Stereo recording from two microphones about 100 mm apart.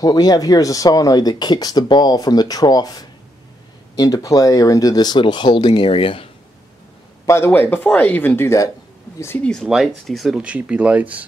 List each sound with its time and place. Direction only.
0.0 s speech: 40° left (ahead or behind); by 6.2 s 65° left (ahead or behind)
7.2 s speech: 25° left (ahead or behind)
9.4 s speech: 5° left (ahead or behind); by 11.2 s 15° right (ahead or behind)